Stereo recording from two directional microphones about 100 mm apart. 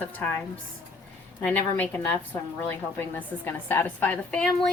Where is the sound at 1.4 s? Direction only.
15° left (ahead or behind).